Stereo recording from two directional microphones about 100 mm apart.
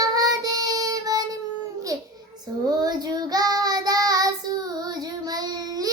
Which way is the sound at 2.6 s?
40° right (ahead or behind).